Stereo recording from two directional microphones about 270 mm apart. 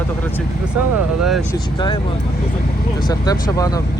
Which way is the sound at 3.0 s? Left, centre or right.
Centre.